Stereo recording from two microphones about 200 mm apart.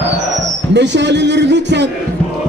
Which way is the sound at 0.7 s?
60° right (ahead or behind).